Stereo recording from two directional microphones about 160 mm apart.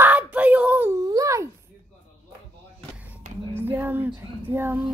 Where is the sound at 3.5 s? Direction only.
15° right (ahead or behind).